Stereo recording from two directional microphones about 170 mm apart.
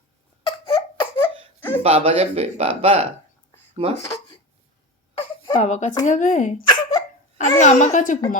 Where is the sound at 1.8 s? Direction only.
35° right (ahead or behind).